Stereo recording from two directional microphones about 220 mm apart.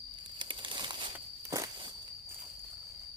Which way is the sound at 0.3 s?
20° right (ahead or behind).